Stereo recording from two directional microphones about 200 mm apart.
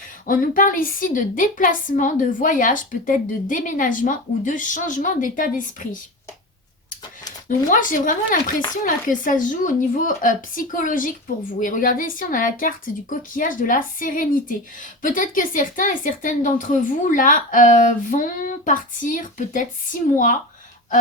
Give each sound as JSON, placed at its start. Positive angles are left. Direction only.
{"t": 0.3, "sound": "a woman's voice", "side_deg": 45}
{"t": 7.7, "sound": "a woman's voice", "side_deg": 40}